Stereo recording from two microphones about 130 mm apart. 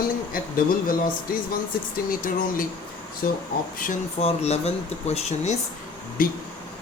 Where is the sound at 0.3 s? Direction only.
90° left.